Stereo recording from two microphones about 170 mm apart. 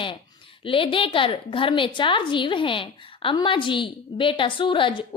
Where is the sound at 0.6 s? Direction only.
30° left (ahead or behind).